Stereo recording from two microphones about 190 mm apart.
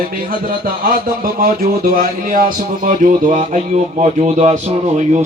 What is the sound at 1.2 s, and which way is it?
Speech, 50° right (ahead or behind).